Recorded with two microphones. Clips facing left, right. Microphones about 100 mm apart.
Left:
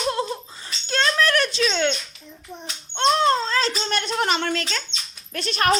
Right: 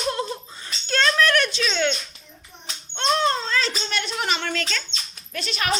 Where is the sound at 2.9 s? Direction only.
30° left (ahead or behind).